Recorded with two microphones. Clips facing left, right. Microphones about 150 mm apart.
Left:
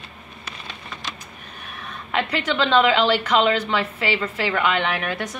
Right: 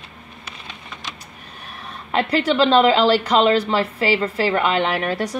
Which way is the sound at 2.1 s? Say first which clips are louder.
Right 5 dB; 35° right (ahead or behind).